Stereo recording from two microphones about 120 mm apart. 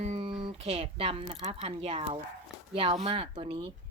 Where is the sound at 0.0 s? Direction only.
65° right (ahead or behind).